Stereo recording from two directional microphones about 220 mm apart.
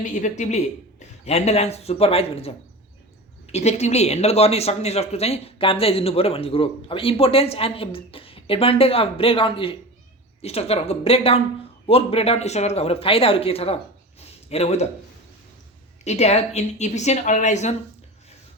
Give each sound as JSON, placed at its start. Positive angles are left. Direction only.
{"t": 0.0, "sound": "speech", "side_deg": 35}
{"t": 14.2, "sound": "a sound", "side_deg": 30}
{"t": 16.0, "sound": "speech", "side_deg": 30}